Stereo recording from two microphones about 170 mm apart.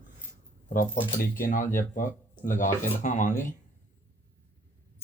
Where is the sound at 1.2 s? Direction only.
55° left (ahead or behind).